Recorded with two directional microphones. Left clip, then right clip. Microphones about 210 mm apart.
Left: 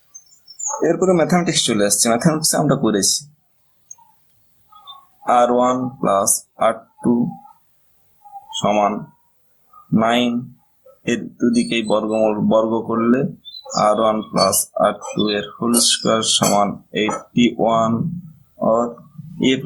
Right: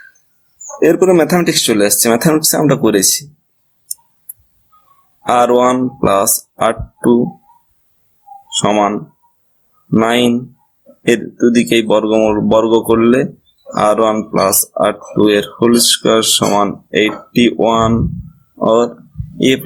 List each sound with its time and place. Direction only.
0.8 s speech: 40° right (ahead or behind)
5.2 s speech: 40° right (ahead or behind)
8.5 s speech: 40° right (ahead or behind)